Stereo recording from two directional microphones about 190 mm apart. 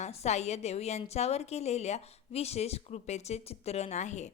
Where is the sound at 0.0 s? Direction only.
35° left (ahead or behind).